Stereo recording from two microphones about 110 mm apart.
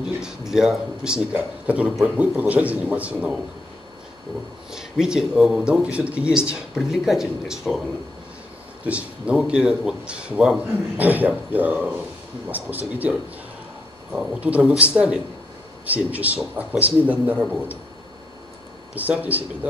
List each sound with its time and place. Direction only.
0.2 s speech: 5° right (ahead or behind)
4.6 s speech: 5° right (ahead or behind)
8.8 s speech: 10° right (ahead or behind)
14.1 s speech: 10° right (ahead or behind)
18.9 s speech: 15° right (ahead or behind)